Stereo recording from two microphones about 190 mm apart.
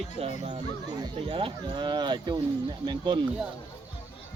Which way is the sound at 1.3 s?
25° right (ahead or behind).